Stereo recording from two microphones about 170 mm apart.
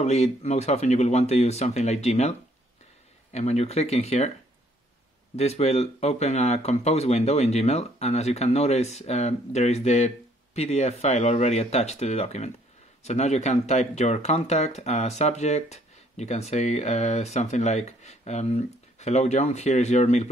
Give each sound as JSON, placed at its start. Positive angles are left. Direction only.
{"t": 0.0, "sound": "speech", "side_deg": 40}
{"t": 3.3, "sound": "speech", "side_deg": 40}
{"t": 5.3, "sound": "speech", "side_deg": 40}